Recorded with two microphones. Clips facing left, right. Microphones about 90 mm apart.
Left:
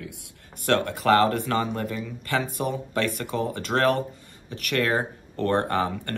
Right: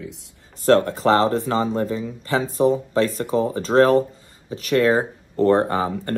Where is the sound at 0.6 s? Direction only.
30° right (ahead or behind).